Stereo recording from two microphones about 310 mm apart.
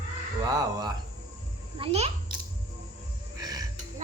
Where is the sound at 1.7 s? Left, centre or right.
Centre.